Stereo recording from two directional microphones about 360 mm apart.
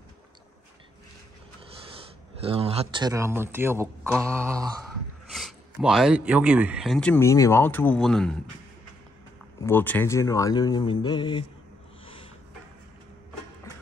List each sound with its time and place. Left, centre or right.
2.4 s speech: centre
9.6 s speech: centre